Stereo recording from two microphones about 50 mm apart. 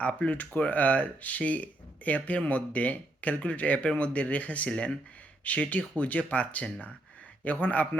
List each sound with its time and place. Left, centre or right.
0.0 s speech: left